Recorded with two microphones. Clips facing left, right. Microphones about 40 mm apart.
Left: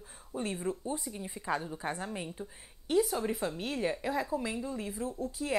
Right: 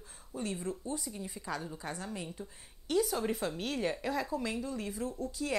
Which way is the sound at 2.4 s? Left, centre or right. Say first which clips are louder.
Left 2 dB; centre.